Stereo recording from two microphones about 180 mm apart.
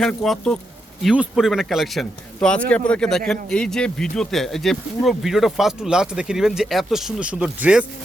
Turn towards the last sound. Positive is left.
turn(degrees=-5)  # may be behind; listen again after turning